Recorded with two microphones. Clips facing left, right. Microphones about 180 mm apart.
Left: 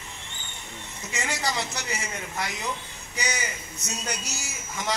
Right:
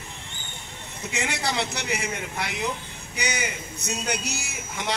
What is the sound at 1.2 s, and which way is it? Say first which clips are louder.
Speech: right 2 dB; 65° right (ahead or behind).